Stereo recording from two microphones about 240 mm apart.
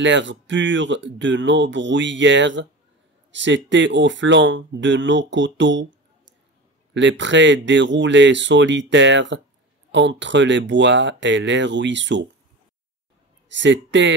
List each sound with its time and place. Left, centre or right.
0.0 s speech: right
6.9 s speech: right
13.5 s speech: right